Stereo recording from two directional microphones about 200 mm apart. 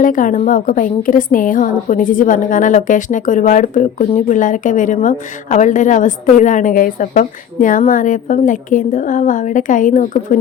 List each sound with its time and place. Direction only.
0.0 s a woman's voice: 40° left (ahead or behind)